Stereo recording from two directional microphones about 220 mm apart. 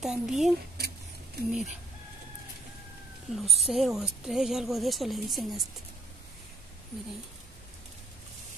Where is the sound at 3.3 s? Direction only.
Centre (ahead or behind).